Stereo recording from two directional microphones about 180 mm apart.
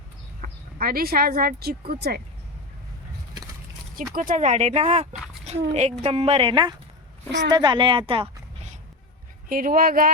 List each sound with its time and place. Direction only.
0.4 s chicken: 50° right (ahead or behind)
0.8 s speech: 55° right (ahead or behind)
4.1 s a child's voice: 50° right (ahead or behind); by 8.3 s 30° right (ahead or behind)
9.5 s speech: 50° right (ahead or behind)